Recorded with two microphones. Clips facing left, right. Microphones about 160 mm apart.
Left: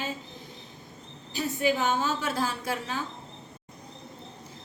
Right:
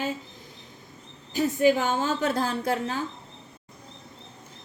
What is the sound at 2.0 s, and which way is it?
Speech, 50° right (ahead or behind).